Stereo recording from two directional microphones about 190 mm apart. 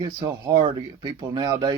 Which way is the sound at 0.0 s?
20° right (ahead or behind).